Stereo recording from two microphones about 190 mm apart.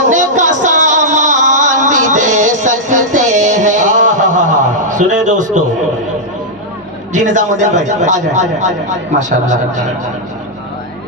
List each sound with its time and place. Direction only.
0.1 s music: 40° right (ahead or behind)
7.1 s speech: 40° right (ahead or behind)